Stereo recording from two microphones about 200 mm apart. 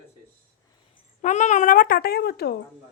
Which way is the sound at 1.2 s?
35° left (ahead or behind).